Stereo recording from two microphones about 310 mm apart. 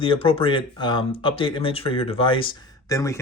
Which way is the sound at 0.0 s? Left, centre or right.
Centre.